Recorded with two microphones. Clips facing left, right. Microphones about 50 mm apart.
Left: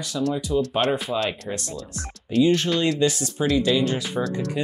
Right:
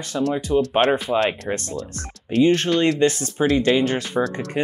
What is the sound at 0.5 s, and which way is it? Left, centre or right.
Speech, right.